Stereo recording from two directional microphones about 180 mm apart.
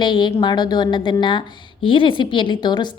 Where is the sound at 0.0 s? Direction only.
25° left (ahead or behind).